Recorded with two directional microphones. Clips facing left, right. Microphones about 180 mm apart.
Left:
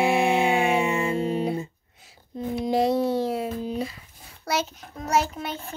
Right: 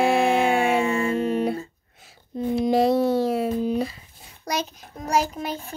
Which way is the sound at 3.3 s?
65° right (ahead or behind).